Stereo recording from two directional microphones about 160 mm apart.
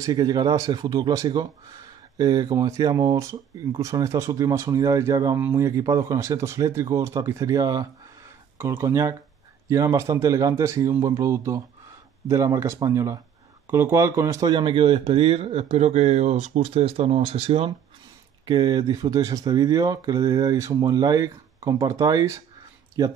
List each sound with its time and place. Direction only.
0.0 s speech: 25° right (ahead or behind)
18.4 s speech: 25° right (ahead or behind)